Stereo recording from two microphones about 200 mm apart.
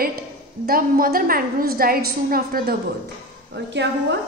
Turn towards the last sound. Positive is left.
turn(degrees=-60)  # may be behind; listen again after turning